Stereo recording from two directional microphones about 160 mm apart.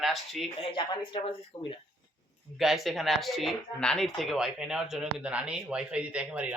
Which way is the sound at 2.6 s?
Centre (ahead or behind).